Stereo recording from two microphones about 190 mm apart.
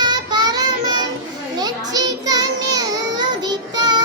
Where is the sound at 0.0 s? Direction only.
20° right (ahead or behind).